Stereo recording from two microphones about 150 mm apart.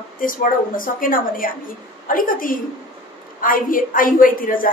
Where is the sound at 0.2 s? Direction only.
65° left (ahead or behind).